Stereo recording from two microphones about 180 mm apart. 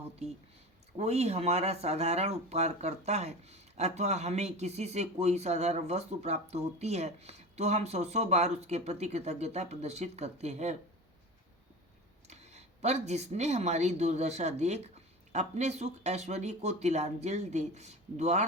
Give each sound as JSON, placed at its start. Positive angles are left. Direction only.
{"t": 0.9, "sound": "speech", "side_deg": -35}
{"t": 12.3, "sound": "speech", "side_deg": -40}